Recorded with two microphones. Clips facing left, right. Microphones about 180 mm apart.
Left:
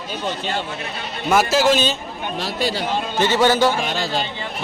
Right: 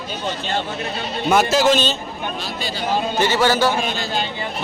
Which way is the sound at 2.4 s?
80° left.